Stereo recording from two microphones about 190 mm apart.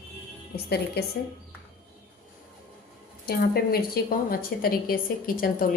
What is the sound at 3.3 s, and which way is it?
A woman's voice, 55° left (ahead or behind).